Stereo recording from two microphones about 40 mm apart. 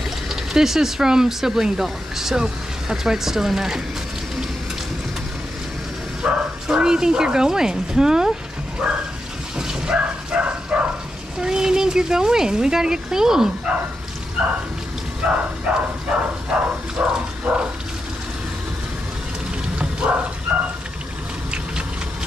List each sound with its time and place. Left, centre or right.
0.3 s speech: centre
6.2 s speech: centre
9.6 s dog: centre
9.9 s bow-wow: right
11.4 s speech: centre
13.7 s a sound: right
14.4 s dog: right
15.2 s a sound: right
20.0 s a sound: right